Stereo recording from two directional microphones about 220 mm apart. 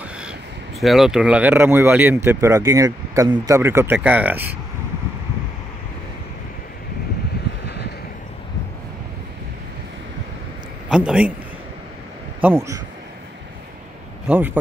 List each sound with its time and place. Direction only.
0.0 s speech: 5° right (ahead or behind)
7.6 s vehicle: 50° left (ahead or behind)
10.9 s a man's voice: 5° right (ahead or behind)
12.4 s speech: 10° right (ahead or behind)
14.2 s speech: 5° right (ahead or behind)